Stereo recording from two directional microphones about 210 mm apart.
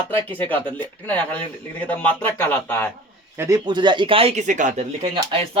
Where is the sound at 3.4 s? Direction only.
15° right (ahead or behind); by 5.1 s 35° right (ahead or behind).